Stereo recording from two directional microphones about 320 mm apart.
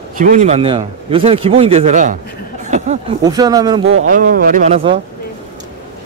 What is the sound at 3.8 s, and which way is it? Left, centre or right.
Speech, right.